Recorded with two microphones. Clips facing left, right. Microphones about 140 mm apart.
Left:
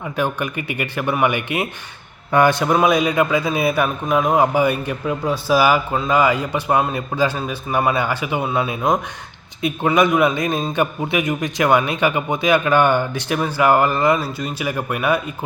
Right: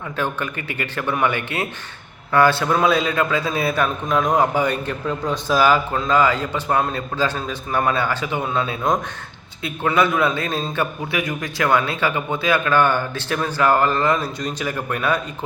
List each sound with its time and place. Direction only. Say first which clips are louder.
0.2 s a man's voice: left 3 dB; 15° left (ahead or behind)